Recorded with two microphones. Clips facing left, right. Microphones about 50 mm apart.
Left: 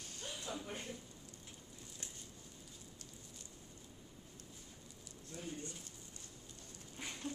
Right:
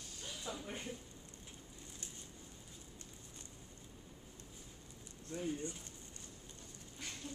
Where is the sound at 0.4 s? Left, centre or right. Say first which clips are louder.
Right 1 dB; centre.